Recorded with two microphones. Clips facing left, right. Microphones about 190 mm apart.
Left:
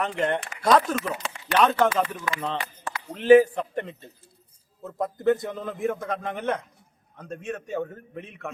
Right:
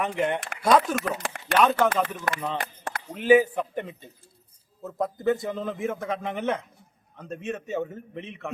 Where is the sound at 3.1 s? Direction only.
5° right (ahead or behind).